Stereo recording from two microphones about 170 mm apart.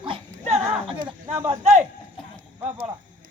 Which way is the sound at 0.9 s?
25° right (ahead or behind).